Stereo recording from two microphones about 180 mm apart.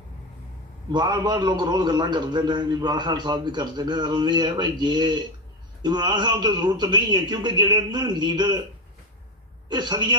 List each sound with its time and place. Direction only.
0.9 s a man's voice: 25° right (ahead or behind)
9.7 s a man's voice: 25° right (ahead or behind)